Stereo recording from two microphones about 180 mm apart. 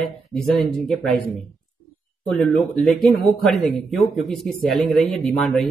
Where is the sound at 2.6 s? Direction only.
Centre (ahead or behind).